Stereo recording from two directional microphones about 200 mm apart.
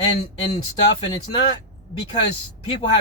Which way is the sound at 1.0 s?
25° left (ahead or behind).